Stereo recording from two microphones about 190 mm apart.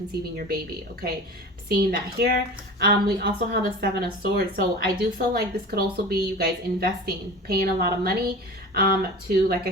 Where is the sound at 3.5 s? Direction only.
55° right (ahead or behind).